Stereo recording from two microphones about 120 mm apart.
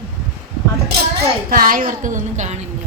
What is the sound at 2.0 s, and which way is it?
Speech, 85° right.